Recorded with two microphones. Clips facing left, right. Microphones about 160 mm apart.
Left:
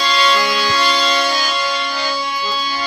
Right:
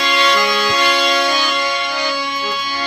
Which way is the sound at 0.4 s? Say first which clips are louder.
Right 1 dB; 20° right (ahead or behind).